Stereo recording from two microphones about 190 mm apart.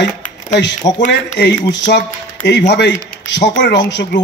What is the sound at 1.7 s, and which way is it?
A man's voice, 70° left (ahead or behind).